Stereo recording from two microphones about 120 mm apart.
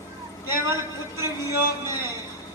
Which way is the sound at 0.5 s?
25° right (ahead or behind).